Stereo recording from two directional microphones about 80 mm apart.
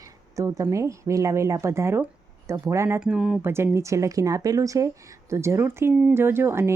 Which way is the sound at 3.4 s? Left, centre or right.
Right.